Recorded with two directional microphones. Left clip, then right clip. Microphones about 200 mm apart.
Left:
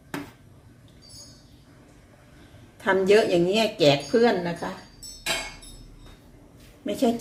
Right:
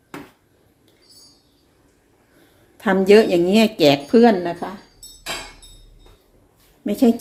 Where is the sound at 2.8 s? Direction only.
35° right (ahead or behind).